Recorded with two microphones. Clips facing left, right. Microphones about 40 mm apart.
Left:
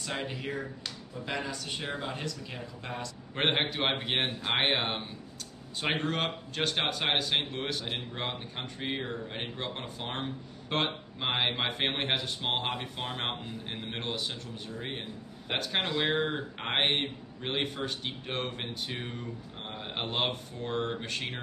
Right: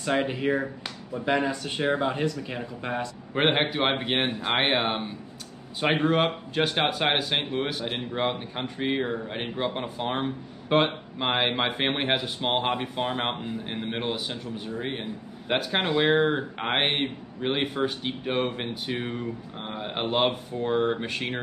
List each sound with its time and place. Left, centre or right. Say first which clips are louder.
0.1 s speech: right 11 dB; right
3.3 s speech: right 5 dB; centre